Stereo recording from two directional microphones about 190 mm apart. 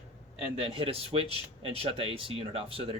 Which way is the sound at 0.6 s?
30° right (ahead or behind).